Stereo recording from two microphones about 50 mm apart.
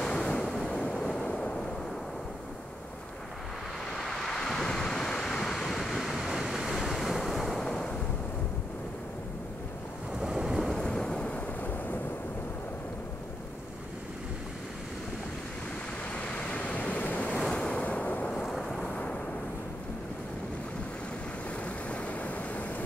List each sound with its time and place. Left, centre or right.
0.0 s waves: centre
1.2 s vehicle: left
3.9 s waves: centre
10.2 s ocean: centre
10.7 s a sound: centre; by 12.0 s left
16.3 s waves: left
17.7 s train: left
18.3 s thunder: centre
18.9 s waves: left
21.6 s vehicle: left